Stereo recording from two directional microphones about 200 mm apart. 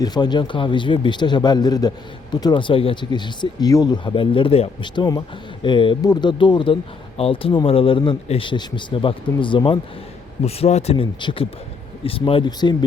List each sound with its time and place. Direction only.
0.0 s speech: 20° left (ahead or behind)